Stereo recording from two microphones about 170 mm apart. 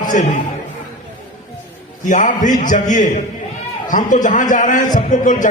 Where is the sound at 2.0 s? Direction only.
50° left (ahead or behind).